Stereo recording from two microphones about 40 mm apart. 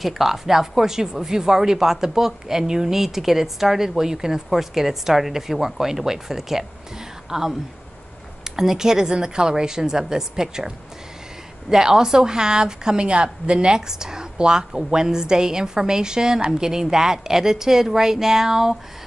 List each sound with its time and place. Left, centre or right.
0.0 s a woman's voice: centre
11.7 s speech: centre